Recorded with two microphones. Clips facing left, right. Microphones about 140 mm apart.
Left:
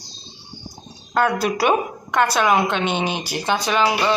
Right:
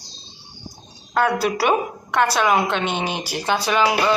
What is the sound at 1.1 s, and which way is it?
Speech, 10° right (ahead or behind).